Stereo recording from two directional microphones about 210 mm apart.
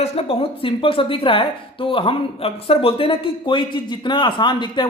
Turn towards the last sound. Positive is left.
turn(degrees=20)  # may be behind; listen again after turning